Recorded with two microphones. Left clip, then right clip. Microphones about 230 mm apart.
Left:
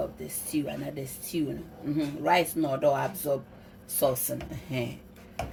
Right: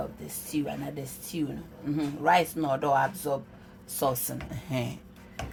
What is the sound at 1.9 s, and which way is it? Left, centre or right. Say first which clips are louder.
Speech: right 1 dB; right.